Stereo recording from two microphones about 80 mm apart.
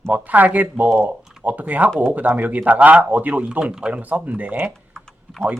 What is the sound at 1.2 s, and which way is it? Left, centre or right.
Typing, centre.